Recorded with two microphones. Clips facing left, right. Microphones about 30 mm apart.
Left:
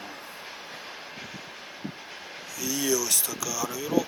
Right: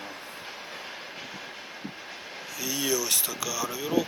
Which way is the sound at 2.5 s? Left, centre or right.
Right.